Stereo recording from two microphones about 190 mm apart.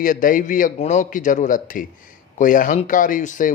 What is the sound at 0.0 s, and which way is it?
Speech, 45° left (ahead or behind).